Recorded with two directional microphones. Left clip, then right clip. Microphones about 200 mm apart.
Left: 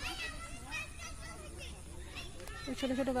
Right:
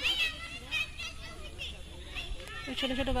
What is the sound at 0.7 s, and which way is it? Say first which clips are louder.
Children playing: right 9 dB; 35° left (ahead or behind).